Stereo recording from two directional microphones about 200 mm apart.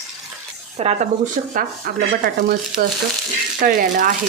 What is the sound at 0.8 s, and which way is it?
Speech, 30° right (ahead or behind).